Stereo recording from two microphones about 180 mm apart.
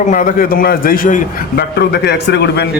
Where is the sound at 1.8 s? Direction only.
65° left (ahead or behind).